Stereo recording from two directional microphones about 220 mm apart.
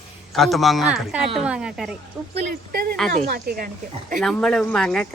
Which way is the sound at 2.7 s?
45° right (ahead or behind).